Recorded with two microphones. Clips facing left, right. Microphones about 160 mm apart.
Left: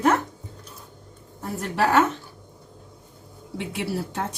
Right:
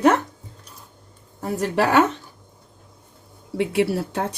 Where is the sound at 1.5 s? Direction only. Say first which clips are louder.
Right 3 dB; 70° right (ahead or behind).